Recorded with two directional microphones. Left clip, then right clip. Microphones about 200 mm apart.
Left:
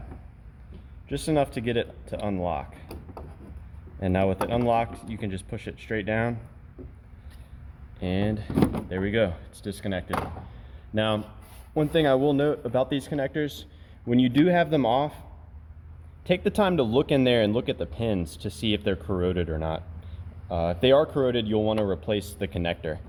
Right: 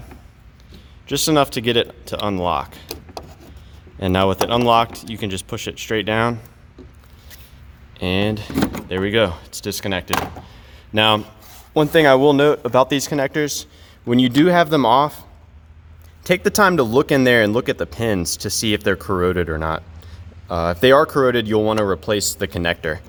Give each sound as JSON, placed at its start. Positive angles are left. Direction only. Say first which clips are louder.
{"t": 1.0, "sound": "speech", "louder": "right 9 dB", "side_deg": -55}
{"t": 4.0, "sound": "speech", "louder": "right 8 dB", "side_deg": -45}
{"t": 7.9, "sound": "speech", "louder": "right 9 dB", "side_deg": -45}
{"t": 16.2, "sound": "speech", "louder": "right 9 dB", "side_deg": -45}
{"t": 18.3, "sound": "speech", "louder": "right 9 dB", "side_deg": -55}